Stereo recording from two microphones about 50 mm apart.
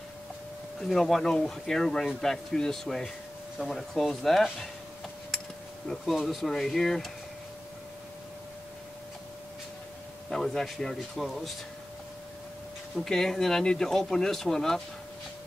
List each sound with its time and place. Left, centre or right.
0.9 s speech: centre
6.1 s speech: centre
10.3 s speech: centre
13.0 s speech: centre